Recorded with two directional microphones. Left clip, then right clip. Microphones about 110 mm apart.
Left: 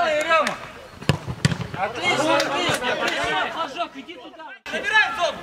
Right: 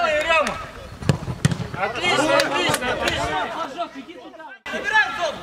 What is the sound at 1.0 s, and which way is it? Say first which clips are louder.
Fireworks: left 1 dB; 10° left (ahead or behind).